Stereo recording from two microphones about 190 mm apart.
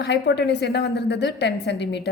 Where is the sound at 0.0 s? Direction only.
65° left (ahead or behind).